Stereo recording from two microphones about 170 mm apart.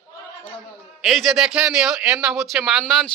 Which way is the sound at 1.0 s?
Centre (ahead or behind).